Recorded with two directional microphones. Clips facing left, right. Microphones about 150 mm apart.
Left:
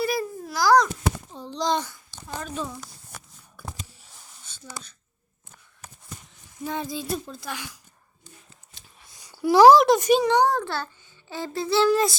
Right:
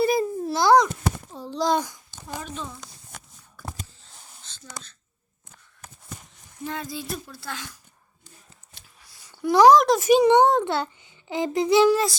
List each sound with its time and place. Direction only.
0.0 s babbling: 25° right (ahead or behind)
1.3 s a sound: 5° right (ahead or behind)
3.9 s whispering: 10° left (ahead or behind)
6.7 s speech: 20° left (ahead or behind)
9.0 s a sound: 20° left (ahead or behind); by 10.1 s centre (ahead or behind)
10.1 s a child's voice: 15° right (ahead or behind)